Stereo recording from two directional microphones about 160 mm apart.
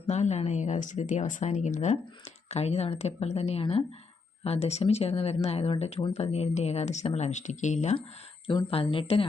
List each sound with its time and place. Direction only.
0.1 s speech: 45° left (ahead or behind)
8.4 s speech: 35° left (ahead or behind)